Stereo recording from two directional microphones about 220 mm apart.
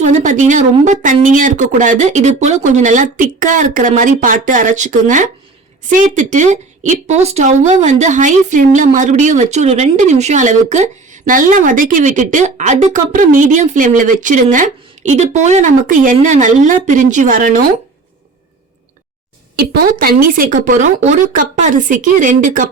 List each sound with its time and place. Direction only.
0.0 s a woman's voice: 35° right (ahead or behind)
19.5 s a woman's voice: 45° right (ahead or behind)